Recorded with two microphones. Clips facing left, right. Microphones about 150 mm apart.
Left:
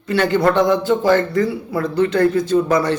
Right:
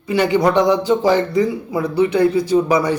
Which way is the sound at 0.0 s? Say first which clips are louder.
Right 1 dB; 10° right (ahead or behind).